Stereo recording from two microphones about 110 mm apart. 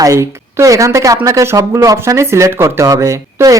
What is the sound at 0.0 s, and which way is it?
A woman's voice, 30° right (ahead or behind).